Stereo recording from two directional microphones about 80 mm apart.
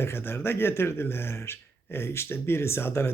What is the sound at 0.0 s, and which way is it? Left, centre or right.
Speech, left.